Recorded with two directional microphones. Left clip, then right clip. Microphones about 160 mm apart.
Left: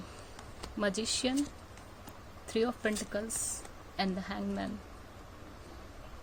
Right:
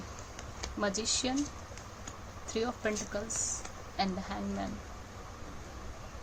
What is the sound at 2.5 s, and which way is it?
Speech, 60° left (ahead or behind).